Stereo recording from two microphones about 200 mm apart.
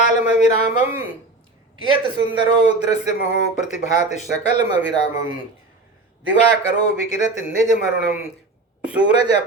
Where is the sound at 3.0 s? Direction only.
35° left (ahead or behind).